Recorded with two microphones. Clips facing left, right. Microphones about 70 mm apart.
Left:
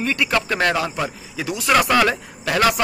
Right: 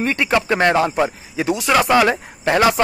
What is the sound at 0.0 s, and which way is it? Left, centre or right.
A man's voice, right.